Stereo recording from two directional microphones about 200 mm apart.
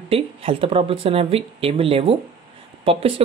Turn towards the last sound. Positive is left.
turn(degrees=-30)  # may be behind; listen again after turning